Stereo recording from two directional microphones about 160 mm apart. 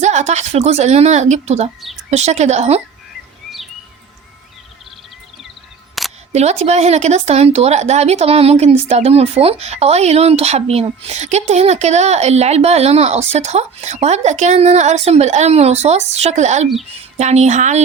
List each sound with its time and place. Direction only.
0.0 s speech: 45° right (ahead or behind)
6.0 s single-lens reflex camera: centre (ahead or behind)
6.3 s speech: 45° right (ahead or behind)